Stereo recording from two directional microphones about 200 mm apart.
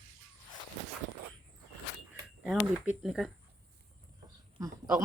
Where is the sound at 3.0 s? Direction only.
Centre (ahead or behind).